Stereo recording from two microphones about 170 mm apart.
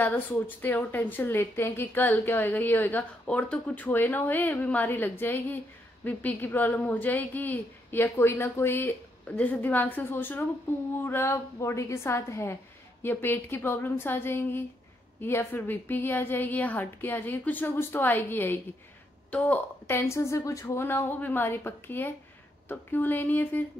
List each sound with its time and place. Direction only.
0.0 s a woman's voice: 10° left (ahead or behind)